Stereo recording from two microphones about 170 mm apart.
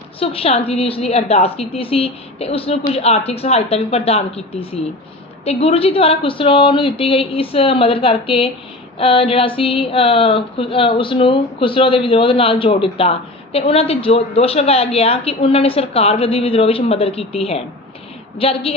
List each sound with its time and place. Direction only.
0.2 s speech: 35° left (ahead or behind)